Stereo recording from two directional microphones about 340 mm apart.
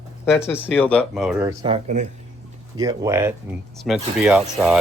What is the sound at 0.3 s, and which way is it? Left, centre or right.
Speech, centre.